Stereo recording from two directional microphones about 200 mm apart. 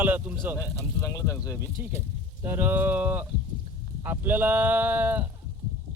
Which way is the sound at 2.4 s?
10° right (ahead or behind).